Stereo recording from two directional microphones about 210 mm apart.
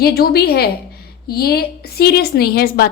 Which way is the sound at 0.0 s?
45° left (ahead or behind).